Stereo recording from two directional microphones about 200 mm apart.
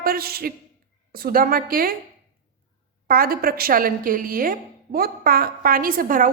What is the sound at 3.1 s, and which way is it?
A woman's voice, 45° right (ahead or behind).